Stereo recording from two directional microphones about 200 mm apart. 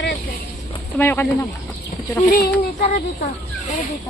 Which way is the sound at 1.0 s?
10° left (ahead or behind).